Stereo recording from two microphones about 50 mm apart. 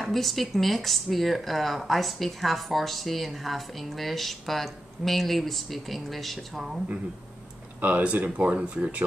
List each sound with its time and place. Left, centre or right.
0.0 s speech: centre
7.8 s speech: right